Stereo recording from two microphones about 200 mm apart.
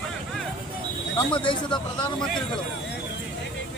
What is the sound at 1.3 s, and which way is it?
Speech, 25° left (ahead or behind).